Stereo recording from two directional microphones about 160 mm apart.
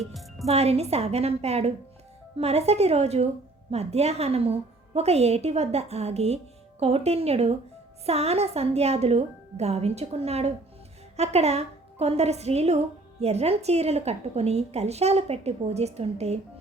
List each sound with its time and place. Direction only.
0.0 s speech: centre (ahead or behind)
0.4 s a woman's voice: 40° right (ahead or behind)